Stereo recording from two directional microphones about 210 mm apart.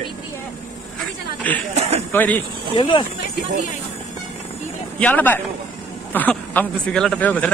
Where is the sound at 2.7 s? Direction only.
20° left (ahead or behind).